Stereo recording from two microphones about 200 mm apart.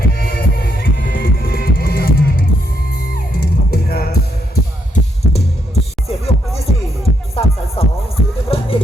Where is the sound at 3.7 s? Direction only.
50° left (ahead or behind).